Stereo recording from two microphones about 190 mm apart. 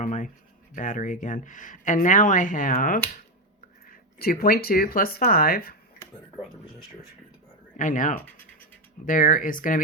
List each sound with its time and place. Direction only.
0.0 s a sound: 40° left (ahead or behind)
0.7 s speech: 40° left (ahead or behind)
4.2 s speech: 50° left (ahead or behind)
7.8 s speech: 40° left (ahead or behind)